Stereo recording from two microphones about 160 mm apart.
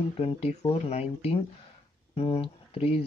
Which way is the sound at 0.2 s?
35° left (ahead or behind).